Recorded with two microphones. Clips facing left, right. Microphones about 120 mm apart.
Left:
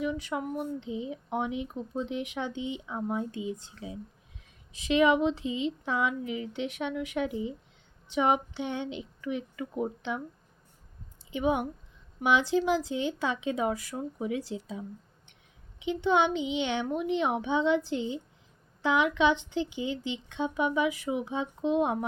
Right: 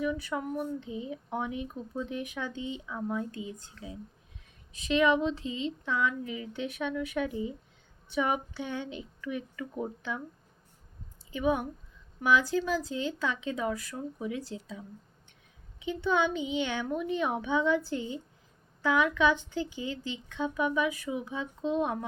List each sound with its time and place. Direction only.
0.0 s speech: 20° left (ahead or behind)
11.3 s speech: 20° left (ahead or behind)